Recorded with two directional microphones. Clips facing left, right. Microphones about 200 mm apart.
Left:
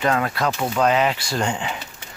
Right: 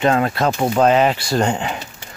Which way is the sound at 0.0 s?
25° right (ahead or behind).